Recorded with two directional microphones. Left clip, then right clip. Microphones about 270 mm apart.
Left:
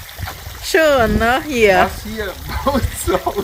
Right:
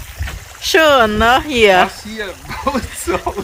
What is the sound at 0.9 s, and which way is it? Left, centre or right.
Speech, centre.